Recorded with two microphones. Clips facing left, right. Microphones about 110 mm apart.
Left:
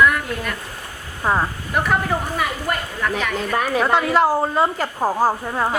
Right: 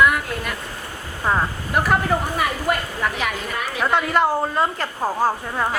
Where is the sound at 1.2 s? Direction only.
10° left (ahead or behind).